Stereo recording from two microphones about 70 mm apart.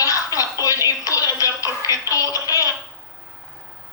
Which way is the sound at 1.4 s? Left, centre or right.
Left.